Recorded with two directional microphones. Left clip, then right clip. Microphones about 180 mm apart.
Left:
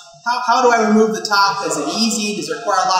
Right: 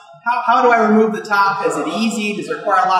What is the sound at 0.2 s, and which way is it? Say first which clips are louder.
Speech: right 1 dB; 15° right (ahead or behind).